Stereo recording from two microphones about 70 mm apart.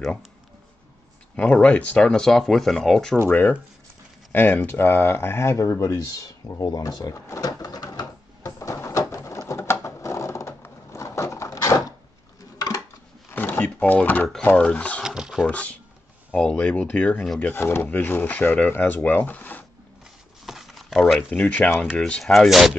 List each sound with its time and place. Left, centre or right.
1.3 s speech: centre
3.3 s speech: left
8.4 s bird: left
9.5 s a sound: left
10.9 s door: left
12.5 s dishes: left
13.3 s a sound: left
14.6 s speech: centre
15.0 s a sound: centre
15.5 s speech: centre
17.4 s speech: left
20.4 s a sound: centre
21.3 s speech: centre
22.2 s speech: centre